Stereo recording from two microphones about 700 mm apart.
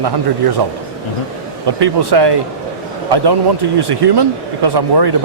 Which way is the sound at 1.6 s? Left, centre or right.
Right.